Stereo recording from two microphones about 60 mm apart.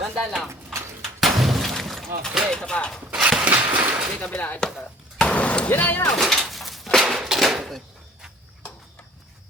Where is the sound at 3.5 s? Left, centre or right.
Right.